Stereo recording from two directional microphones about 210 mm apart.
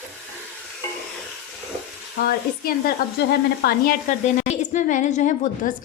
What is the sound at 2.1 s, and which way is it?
Frying, 45° left (ahead or behind).